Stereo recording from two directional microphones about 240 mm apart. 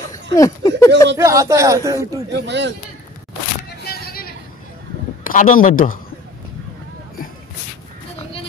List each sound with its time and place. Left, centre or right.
0.1 s speech: centre
1.1 s speech: centre
2.3 s speech: right
3.8 s a sound: left
5.2 s a man's voice: left